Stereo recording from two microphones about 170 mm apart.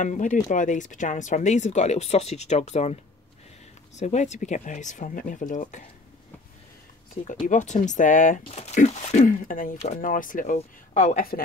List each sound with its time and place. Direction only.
0.0 s speech: 50° left (ahead or behind)
7.4 s speech: 45° left (ahead or behind)